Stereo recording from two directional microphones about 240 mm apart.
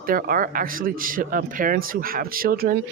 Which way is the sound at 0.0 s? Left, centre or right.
Right.